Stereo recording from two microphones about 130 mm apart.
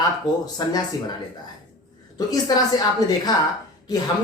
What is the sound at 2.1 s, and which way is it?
Speech, 30° left (ahead or behind).